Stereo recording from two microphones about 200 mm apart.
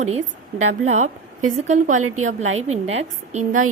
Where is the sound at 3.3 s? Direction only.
35° right (ahead or behind).